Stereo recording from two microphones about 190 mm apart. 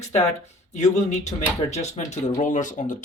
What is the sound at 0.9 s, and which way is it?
Speech, 35° left (ahead or behind).